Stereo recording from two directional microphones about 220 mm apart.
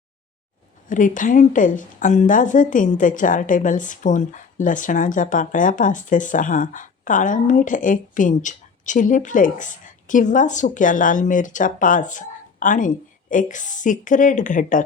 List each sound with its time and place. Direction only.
0.9 s speech: 35° left (ahead or behind)